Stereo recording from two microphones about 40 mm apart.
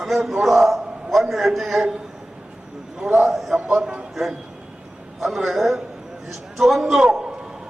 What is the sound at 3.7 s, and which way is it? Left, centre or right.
Speech, centre.